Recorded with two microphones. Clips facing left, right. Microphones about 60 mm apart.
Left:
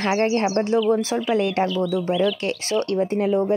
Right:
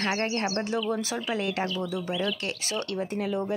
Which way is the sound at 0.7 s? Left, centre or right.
Left.